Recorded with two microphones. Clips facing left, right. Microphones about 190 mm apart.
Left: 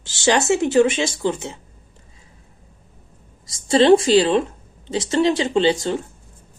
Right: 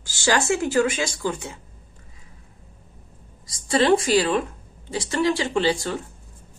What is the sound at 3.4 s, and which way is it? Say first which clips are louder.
A woman's voice: left 6 dB; 25° left (ahead or behind).